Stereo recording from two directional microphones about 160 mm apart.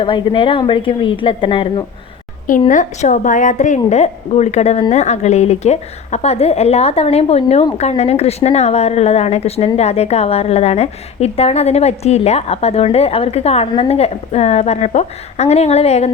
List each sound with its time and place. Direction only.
0.0 s speech: 30° left (ahead or behind)
2.5 s a woman's voice: 50° left (ahead or behind)